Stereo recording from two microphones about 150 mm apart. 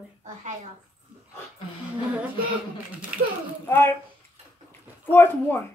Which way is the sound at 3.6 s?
15° left (ahead or behind).